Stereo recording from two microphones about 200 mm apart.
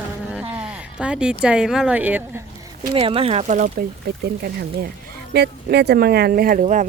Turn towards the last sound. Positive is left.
turn(degrees=-40)  # may be behind; listen again after turning